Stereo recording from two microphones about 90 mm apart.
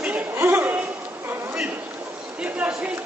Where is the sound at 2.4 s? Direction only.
15° right (ahead or behind).